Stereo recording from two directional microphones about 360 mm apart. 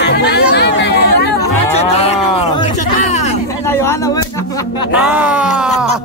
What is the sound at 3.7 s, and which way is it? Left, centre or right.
Speech, centre.